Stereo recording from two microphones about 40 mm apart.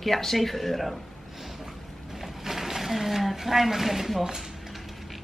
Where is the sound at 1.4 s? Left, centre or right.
Centre.